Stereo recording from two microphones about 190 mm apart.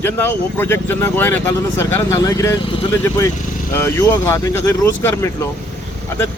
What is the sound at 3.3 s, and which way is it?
Vehicle, 45° left (ahead or behind).